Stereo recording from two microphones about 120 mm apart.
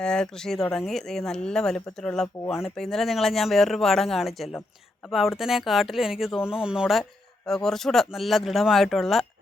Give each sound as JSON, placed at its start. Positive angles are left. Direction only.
{"t": 0.0, "sound": "speech", "side_deg": 5}